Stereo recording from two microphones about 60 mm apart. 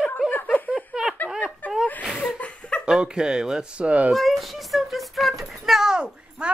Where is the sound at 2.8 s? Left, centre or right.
Centre.